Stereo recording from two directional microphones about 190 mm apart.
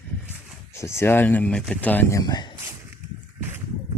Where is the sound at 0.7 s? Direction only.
15° left (ahead or behind).